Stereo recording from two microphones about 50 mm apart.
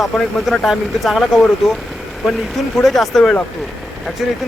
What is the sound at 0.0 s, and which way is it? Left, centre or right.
Speech, centre.